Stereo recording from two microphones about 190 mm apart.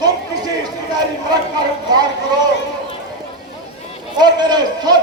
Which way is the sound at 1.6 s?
20° right (ahead or behind).